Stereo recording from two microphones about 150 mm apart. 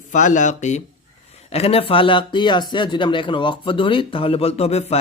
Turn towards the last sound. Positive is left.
turn(degrees=45)  # may be behind; listen again after turning